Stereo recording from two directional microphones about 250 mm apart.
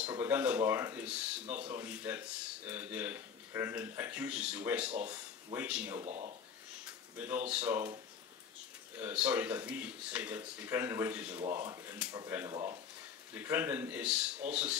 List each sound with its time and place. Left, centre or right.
0.0 s speech: centre
6.0 s speech: right
7.2 s speech: centre
8.9 s speech: centre